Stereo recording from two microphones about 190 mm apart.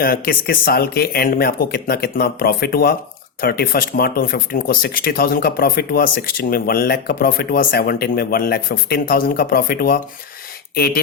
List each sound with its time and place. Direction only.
0.0 s speech: 50° left (ahead or behind)